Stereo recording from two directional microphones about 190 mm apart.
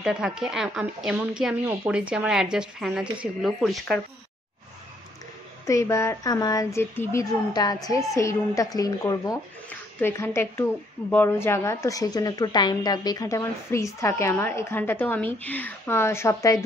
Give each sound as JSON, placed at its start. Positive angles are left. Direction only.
{"t": 0.0, "sound": "speech", "side_deg": -5}
{"t": 5.7, "sound": "speech", "side_deg": 15}